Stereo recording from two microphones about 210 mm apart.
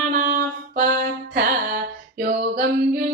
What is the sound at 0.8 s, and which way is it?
Music, 50° right (ahead or behind).